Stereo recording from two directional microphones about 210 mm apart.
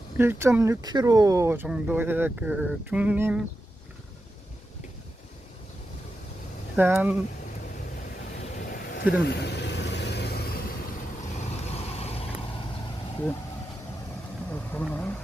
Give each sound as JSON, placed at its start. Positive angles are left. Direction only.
{"t": 0.2, "sound": "speech", "side_deg": -10}
{"t": 6.7, "sound": "speech", "side_deg": -10}
{"t": 9.2, "sound": "vehicle", "side_deg": 50}
{"t": 11.6, "sound": "vehicle", "side_deg": 30}
{"t": 14.5, "sound": "vehicle", "side_deg": 10}